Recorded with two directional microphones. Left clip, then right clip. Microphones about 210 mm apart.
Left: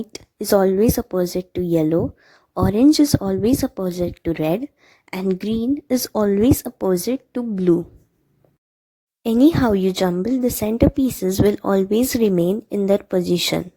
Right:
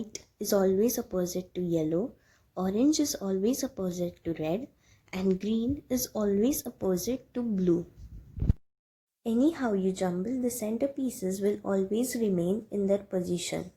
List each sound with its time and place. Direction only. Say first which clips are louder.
0.1 s a woman's voice: left 11 dB; 40° left (ahead or behind)
9.2 s a woman's voice: left 12 dB; 40° left (ahead or behind)